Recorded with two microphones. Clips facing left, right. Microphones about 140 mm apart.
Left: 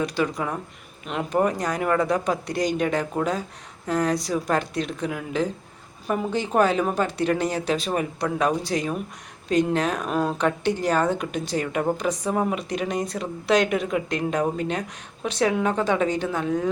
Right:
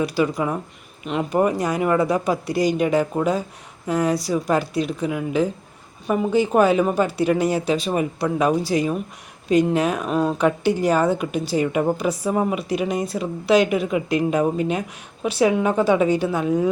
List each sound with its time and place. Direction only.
0.0 s speech: 5° right (ahead or behind)